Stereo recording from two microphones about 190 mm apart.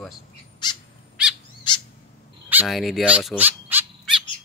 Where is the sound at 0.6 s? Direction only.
25° left (ahead or behind).